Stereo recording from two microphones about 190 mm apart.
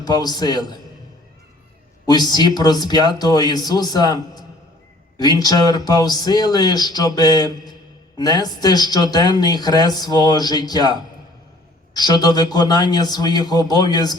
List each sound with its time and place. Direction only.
0.0 s speech: 20° left (ahead or behind)
2.0 s speech: 20° left (ahead or behind)
11.9 s speech: 20° left (ahead or behind)